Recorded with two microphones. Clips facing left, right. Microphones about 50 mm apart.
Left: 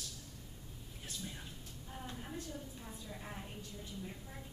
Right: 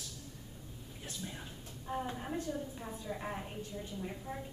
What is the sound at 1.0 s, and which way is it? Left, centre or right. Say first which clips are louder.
Speech: right 3 dB; centre.